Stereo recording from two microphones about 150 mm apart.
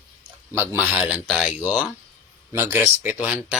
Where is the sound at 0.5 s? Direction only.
15° right (ahead or behind).